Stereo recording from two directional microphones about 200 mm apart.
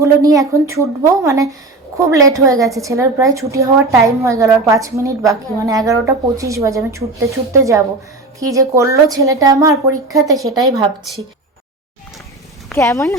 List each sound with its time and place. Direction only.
0.0 s a woman's voice: 15° right (ahead or behind)
12.7 s speech: 15° left (ahead or behind)